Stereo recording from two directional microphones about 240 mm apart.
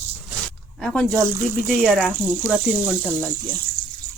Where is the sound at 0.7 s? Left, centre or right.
Centre.